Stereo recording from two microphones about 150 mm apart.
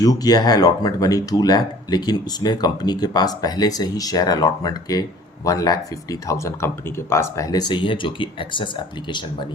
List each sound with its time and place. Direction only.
0.0 s speech: 25° left (ahead or behind)